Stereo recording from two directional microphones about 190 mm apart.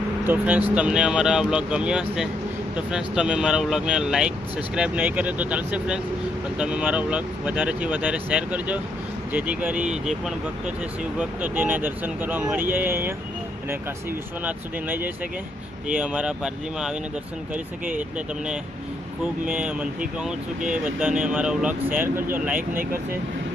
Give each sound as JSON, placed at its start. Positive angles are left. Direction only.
{"t": 0.3, "sound": "speech", "side_deg": -10}
{"t": 14.4, "sound": "speech", "side_deg": -10}
{"t": 19.2, "sound": "speech", "side_deg": -5}
{"t": 21.2, "sound": "speech", "side_deg": -5}
{"t": 22.0, "sound": "speech", "side_deg": -45}